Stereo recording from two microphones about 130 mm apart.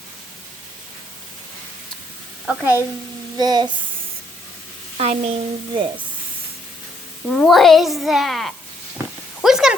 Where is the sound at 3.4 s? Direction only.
35° right (ahead or behind).